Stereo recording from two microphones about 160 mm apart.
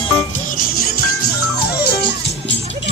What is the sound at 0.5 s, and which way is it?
Music, 65° left (ahead or behind).